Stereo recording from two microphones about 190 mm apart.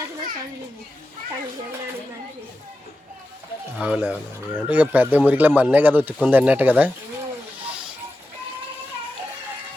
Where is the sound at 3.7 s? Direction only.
5° right (ahead or behind).